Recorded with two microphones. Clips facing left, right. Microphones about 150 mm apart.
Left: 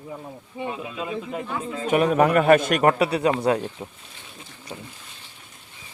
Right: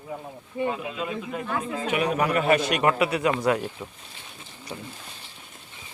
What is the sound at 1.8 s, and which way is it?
A man's voice, 45° left (ahead or behind).